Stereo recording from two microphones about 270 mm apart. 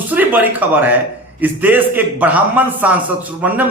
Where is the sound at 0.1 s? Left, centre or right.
Centre.